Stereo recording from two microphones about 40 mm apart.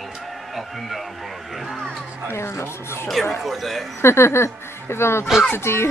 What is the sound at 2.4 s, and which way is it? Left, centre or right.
Speech, left.